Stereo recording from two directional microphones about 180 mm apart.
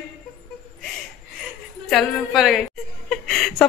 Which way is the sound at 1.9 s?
Centre (ahead or behind).